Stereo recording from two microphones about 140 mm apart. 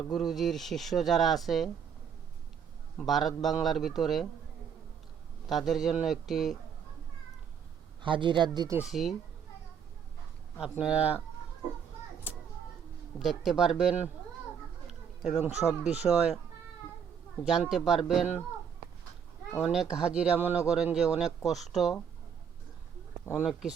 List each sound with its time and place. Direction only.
0.1 s speech: centre (ahead or behind)
3.1 s speech: centre (ahead or behind)
5.5 s speech: centre (ahead or behind)
8.0 s a man's voice: 35° right (ahead or behind)
8.9 s speech: centre (ahead or behind)
10.6 s speech: 5° right (ahead or behind)
13.1 s speech: centre (ahead or behind)
15.2 s speech: 50° left (ahead or behind)
16.0 s speech: 15° left (ahead or behind)
17.4 s speech: centre (ahead or behind)
19.5 s speech: 5° right (ahead or behind)
23.4 s speech: 5° right (ahead or behind)